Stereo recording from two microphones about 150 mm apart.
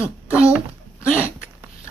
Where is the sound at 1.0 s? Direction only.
15° left (ahead or behind).